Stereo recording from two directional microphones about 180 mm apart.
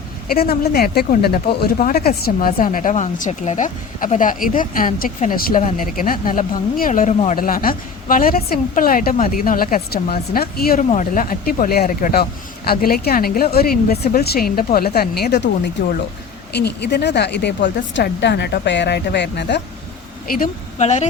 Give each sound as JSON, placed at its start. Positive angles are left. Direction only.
{"t": 0.3, "sound": "a woman's voice", "side_deg": 60}
{"t": 16.6, "sound": "speech", "side_deg": 70}
{"t": 20.3, "sound": "speech", "side_deg": 45}